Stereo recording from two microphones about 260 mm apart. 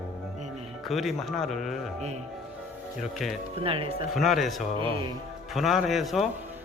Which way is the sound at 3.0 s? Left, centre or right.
Centre.